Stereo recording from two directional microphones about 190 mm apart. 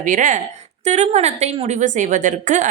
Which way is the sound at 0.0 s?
45° right (ahead or behind).